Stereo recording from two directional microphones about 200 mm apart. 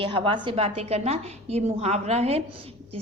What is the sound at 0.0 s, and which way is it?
A woman's voice, 25° right (ahead or behind).